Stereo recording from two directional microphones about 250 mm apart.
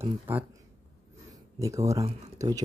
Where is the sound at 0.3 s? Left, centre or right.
Centre.